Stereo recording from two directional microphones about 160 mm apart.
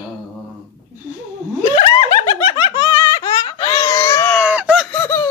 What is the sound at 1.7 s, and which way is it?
Giggle, 30° left (ahead or behind).